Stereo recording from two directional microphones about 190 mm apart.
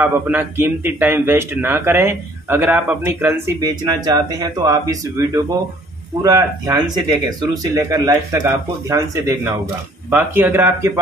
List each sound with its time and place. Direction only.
0.0 s speech: 10° right (ahead or behind)